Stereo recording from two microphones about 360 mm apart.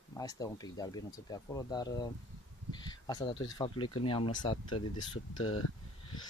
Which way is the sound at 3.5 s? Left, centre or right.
Centre.